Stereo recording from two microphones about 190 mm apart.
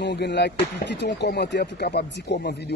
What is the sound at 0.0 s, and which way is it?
Speech, 60° left (ahead or behind).